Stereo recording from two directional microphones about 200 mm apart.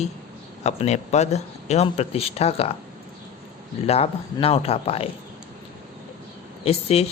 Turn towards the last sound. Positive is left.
turn(degrees=30)  # may be behind; listen again after turning